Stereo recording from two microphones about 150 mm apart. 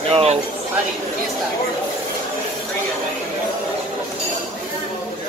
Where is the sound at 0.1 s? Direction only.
45° right (ahead or behind).